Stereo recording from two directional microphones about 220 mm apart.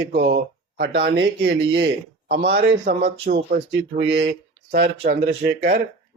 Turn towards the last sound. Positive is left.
turn(degrees=-45)  # may be behind; listen again after turning